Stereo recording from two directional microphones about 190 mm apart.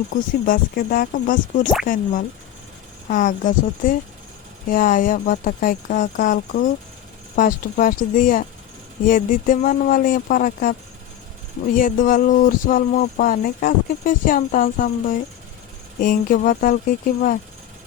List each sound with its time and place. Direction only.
0.1 s speech: 50° left (ahead or behind)
11.8 s speech: 45° left (ahead or behind)